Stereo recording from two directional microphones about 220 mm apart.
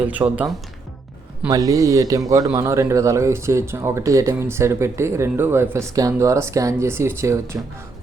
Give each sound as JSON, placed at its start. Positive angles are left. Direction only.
{"t": 0.0, "sound": "speech", "side_deg": -5}